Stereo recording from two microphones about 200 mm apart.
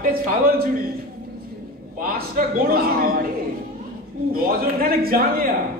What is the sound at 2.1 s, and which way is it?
A woman's voice, 45° right (ahead or behind).